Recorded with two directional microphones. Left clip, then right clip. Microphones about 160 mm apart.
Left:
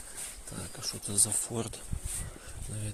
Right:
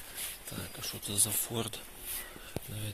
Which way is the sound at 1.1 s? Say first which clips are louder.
Left 2 dB; 30° left (ahead or behind).